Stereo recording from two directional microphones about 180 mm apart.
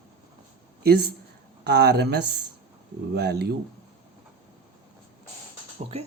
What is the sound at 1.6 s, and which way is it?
Speech, 65° right (ahead or behind).